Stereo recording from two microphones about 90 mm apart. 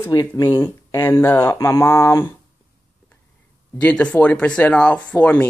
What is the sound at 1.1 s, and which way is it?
Speech, 35° left (ahead or behind).